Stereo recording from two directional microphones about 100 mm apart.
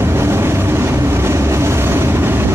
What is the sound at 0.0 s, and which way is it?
Vehicle, 25° right (ahead or behind).